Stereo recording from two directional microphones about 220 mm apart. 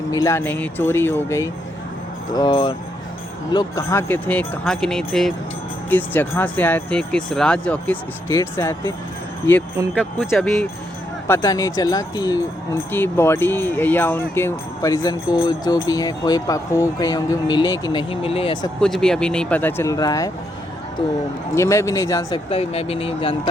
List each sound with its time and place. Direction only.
0.1 s speech: 15° left (ahead or behind)
10.0 s speech: centre (ahead or behind)
11.3 s speech: 15° left (ahead or behind)
18.8 s speech: centre (ahead or behind)
21.5 s speech: 15° left (ahead or behind)
22.4 s speech: 25° left (ahead or behind)